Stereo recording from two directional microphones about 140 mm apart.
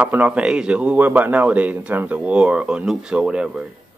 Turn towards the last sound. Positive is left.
turn(degrees=-5)  # may be behind; listen again after turning